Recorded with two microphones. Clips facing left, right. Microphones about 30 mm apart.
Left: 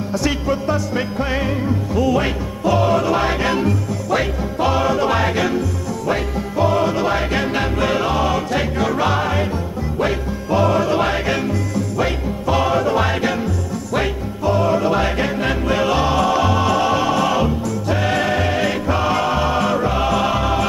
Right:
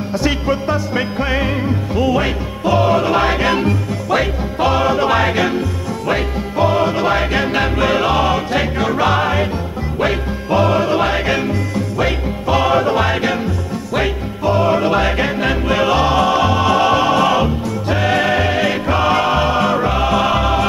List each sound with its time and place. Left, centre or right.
0.1 s music: right
14.7 s music: right